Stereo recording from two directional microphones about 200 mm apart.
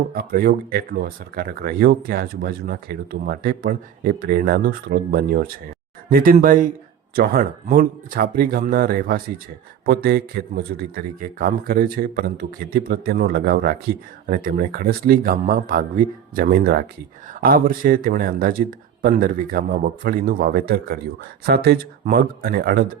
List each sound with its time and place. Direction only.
0.1 s speech: 50° right (ahead or behind)